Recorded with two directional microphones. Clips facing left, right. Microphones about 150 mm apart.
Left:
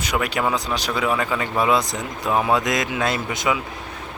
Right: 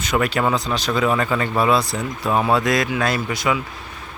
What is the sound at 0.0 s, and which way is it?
Speech, 10° left (ahead or behind).